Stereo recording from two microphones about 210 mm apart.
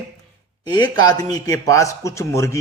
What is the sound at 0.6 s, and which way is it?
Speech, 20° left (ahead or behind).